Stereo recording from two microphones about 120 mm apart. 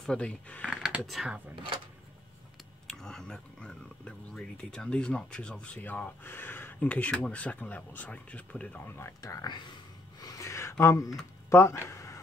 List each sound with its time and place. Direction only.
0.0 s speech: 10° left (ahead or behind)
0.7 s speech: 5° right (ahead or behind)
2.9 s speech: 5° left (ahead or behind)
9.2 s speech: 30° left (ahead or behind)
10.2 s a sound: 25° left (ahead or behind)